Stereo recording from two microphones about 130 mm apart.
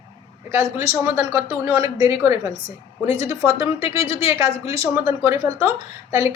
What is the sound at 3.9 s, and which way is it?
Speech, 50° left (ahead or behind).